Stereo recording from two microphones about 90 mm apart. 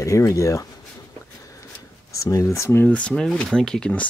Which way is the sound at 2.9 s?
10° left (ahead or behind).